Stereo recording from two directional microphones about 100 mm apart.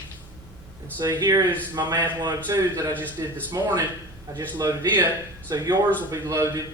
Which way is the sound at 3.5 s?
35° right (ahead or behind).